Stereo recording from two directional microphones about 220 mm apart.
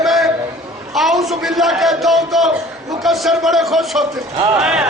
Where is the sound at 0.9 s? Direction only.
Centre (ahead or behind).